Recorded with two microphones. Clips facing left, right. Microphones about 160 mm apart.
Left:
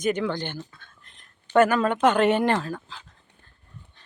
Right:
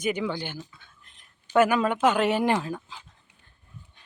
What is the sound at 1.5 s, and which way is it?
A woman's voice, 10° right (ahead or behind).